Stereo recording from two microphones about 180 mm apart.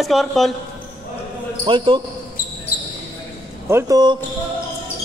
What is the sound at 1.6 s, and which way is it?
Speech, 30° right (ahead or behind).